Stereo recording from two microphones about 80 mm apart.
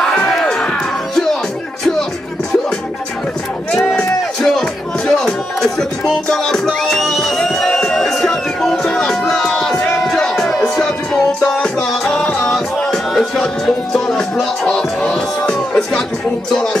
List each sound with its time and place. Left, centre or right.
0.0 s music: centre
3.7 s a sound: centre
4.4 s music: centre